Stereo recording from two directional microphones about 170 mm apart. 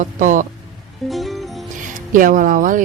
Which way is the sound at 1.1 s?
Centre (ahead or behind).